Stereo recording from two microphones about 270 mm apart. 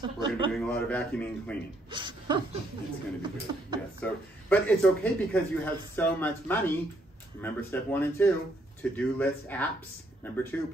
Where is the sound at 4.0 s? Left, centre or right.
Centre.